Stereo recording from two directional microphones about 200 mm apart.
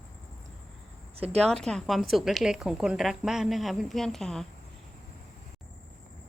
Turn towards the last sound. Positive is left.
turn(degrees=5)  # may be behind; listen again after turning